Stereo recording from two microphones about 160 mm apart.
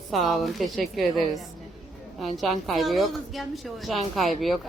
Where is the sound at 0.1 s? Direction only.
Centre (ahead or behind).